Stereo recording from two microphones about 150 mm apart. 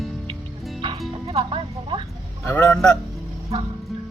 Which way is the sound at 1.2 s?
35° right (ahead or behind).